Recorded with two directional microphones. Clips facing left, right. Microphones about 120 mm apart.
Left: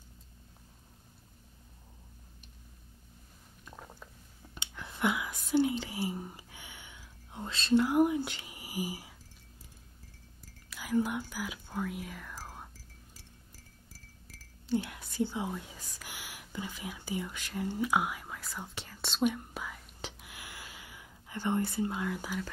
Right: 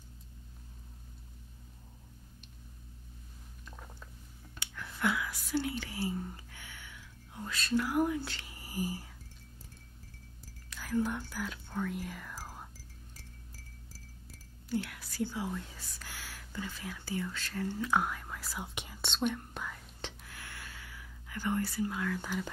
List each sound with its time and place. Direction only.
3.6 s a sound: 15° left (ahead or behind)
4.6 s whispering: 20° left (ahead or behind)
10.7 s whispering: 15° left (ahead or behind); by 12.6 s 5° right (ahead or behind)
14.7 s speech: 20° left (ahead or behind); by 18.7 s 5° right (ahead or behind)
18.9 s whispering: 5° left (ahead or behind); by 22.2 s 20° left (ahead or behind)